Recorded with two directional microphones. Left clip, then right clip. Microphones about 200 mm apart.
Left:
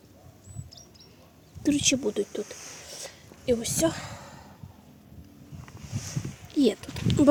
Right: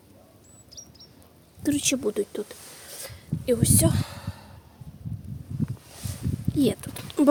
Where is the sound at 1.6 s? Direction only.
Centre (ahead or behind).